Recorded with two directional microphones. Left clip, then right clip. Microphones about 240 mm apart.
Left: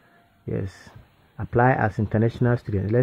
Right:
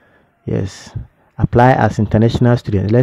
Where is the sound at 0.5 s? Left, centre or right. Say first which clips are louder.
Right 9 dB; right.